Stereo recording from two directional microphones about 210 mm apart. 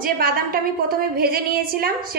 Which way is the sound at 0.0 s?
45° right (ahead or behind).